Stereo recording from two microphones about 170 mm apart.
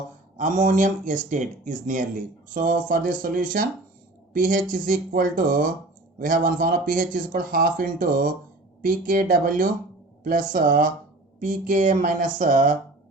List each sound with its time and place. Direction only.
0.3 s speech: 50° right (ahead or behind)